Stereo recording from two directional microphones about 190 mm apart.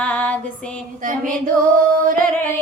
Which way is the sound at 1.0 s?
45° right (ahead or behind).